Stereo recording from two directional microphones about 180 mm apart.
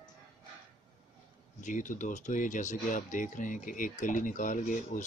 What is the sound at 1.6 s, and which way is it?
Speech, 45° left (ahead or behind).